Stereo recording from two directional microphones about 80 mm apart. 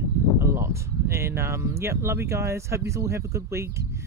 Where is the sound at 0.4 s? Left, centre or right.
Right.